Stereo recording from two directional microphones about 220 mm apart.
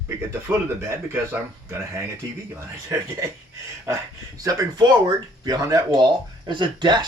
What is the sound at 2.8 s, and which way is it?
Speech, 15° right (ahead or behind).